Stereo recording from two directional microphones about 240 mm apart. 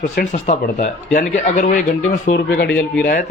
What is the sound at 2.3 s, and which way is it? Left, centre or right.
Speech, left.